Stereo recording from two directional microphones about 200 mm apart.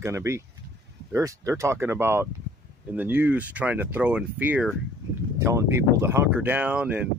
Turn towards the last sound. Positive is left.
turn(degrees=-5)  # may be behind; listen again after turning